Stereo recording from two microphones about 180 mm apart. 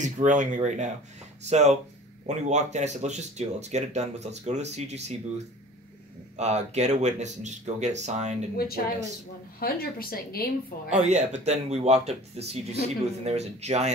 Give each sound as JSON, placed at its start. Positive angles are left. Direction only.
{"t": 0.0, "sound": "speech", "side_deg": -45}
{"t": 6.3, "sound": "speech", "side_deg": -40}
{"t": 9.6, "sound": "speech", "side_deg": 55}
{"t": 10.9, "sound": "speech", "side_deg": -40}